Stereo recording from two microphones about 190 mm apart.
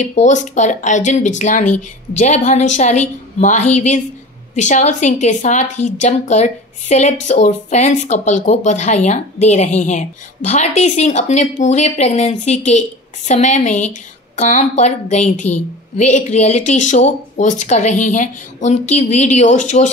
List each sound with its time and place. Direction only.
0.0 s a woman's voice: 40° left (ahead or behind)